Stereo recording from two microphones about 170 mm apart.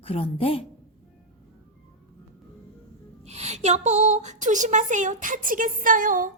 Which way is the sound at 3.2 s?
40° right (ahead or behind).